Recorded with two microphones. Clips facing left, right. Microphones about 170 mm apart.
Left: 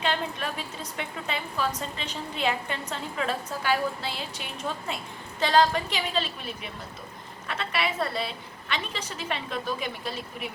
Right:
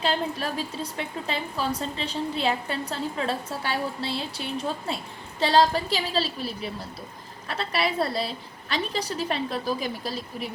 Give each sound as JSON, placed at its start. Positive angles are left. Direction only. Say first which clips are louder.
{"t": 0.0, "sound": "a woman's voice", "louder": "right 2 dB", "side_deg": -35}